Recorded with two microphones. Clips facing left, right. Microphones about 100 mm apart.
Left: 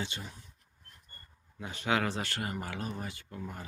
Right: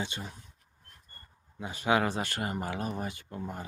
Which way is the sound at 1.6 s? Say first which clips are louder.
Right 4 dB; 15° right (ahead or behind).